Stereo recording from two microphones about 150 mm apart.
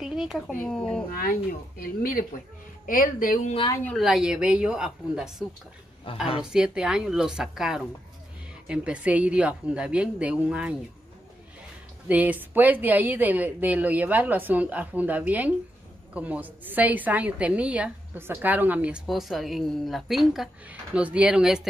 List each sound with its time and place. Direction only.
0.0 s a sound: 5° right (ahead or behind)
0.5 s a woman's voice: 5° left (ahead or behind)
1.1 s speech: 70° left (ahead or behind)
3.9 s a woman's voice: centre (ahead or behind)
6.4 s a woman's voice: 5° right (ahead or behind)
12.1 s a woman's voice: 10° right (ahead or behind)